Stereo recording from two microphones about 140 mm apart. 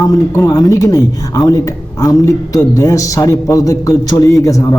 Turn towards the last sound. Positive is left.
turn(degrees=25)  # may be behind; listen again after turning